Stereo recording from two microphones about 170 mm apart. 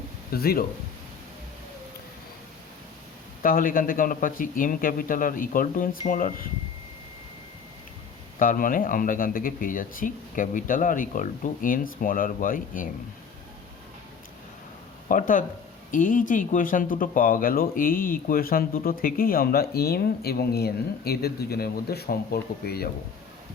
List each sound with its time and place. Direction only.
0.3 s speech: 65° left (ahead or behind)
3.4 s speech: 55° left (ahead or behind)
8.4 s speech: 55° left (ahead or behind)
15.1 s speech: 50° left (ahead or behind)